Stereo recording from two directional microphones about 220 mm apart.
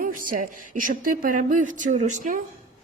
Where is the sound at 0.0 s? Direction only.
40° right (ahead or behind).